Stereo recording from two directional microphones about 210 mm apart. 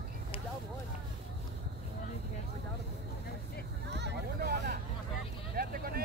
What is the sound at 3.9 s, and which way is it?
Vehicle, 55° right (ahead or behind).